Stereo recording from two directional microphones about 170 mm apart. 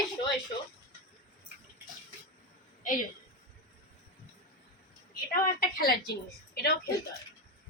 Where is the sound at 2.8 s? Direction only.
50° left (ahead or behind).